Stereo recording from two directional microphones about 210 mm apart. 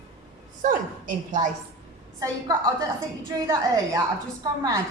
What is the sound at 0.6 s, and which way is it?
Speech, 40° right (ahead or behind).